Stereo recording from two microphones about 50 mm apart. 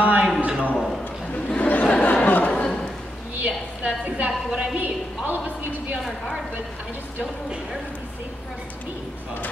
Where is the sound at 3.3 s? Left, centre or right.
Right.